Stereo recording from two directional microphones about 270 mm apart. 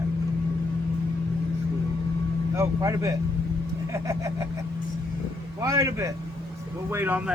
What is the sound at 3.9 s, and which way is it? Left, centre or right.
Vehicle, centre.